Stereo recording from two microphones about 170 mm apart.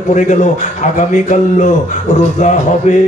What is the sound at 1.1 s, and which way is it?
Speech, 45° left (ahead or behind).